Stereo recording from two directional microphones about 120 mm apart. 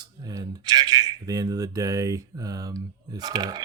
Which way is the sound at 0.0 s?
30° right (ahead or behind).